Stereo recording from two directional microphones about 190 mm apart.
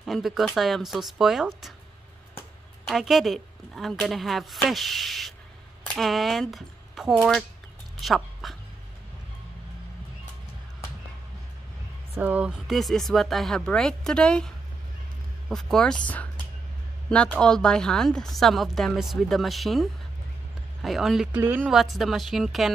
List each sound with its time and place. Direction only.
0.0 s a woman's voice: centre (ahead or behind)
2.9 s a woman's voice: centre (ahead or behind)
8.0 s a sound: centre (ahead or behind)
12.2 s a woman's voice: 5° right (ahead or behind)
17.1 s a woman's voice: 5° left (ahead or behind)